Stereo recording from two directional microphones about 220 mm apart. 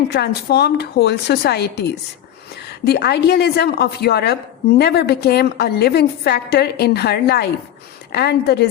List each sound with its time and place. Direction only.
0.1 s a woman's voice: 45° left (ahead or behind)